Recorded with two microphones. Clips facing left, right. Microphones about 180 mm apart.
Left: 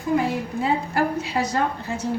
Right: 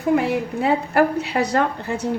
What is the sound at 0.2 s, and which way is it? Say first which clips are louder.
A woman's voice: right 3 dB; 65° right (ahead or behind).